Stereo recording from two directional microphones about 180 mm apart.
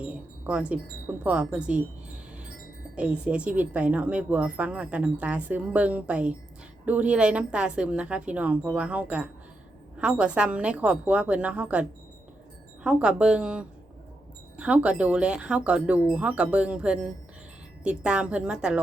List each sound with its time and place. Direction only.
0.0 s wind chime: 5° right (ahead or behind)
1.2 s a woman's voice: 10° right (ahead or behind)
2.9 s a woman's voice: 5° right (ahead or behind)